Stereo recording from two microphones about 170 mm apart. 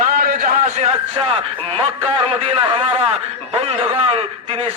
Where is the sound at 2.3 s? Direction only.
30° right (ahead or behind).